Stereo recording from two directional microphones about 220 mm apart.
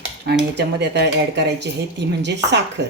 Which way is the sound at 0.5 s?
50° right (ahead or behind).